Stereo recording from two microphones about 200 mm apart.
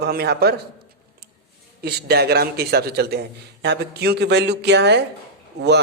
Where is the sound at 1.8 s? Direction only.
55° right (ahead or behind).